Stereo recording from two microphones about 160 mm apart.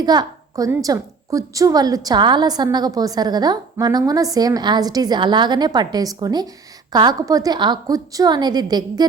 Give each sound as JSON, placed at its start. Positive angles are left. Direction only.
{"t": 0.0, "sound": "a woman's voice", "side_deg": -25}